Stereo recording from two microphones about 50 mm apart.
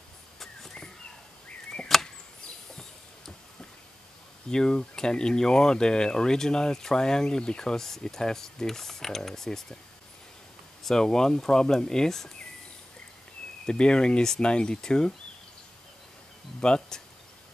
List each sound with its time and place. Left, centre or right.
0.4 s bird: centre
1.9 s a sound: centre
4.5 s speech: centre
10.8 s speech: centre
13.7 s speech: centre
16.6 s a sound: centre